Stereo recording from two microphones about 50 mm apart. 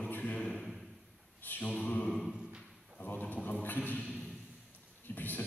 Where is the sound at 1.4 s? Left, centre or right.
Left.